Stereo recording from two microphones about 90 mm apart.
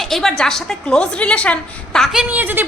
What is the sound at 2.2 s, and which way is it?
Speech, 20° right (ahead or behind).